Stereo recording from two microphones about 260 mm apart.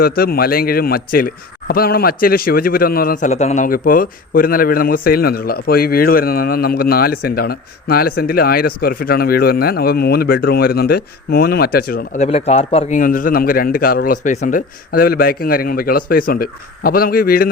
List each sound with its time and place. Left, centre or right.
0.0 s speech: left